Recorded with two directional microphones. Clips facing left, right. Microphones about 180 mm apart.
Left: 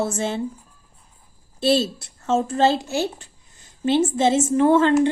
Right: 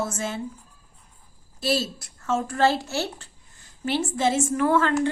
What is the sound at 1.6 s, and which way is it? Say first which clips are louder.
Speech: left 6 dB; 25° left (ahead or behind).